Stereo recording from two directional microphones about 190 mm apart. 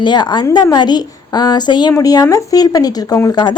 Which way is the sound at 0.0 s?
25° left (ahead or behind).